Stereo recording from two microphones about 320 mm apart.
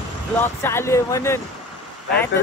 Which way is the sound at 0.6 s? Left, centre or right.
Centre.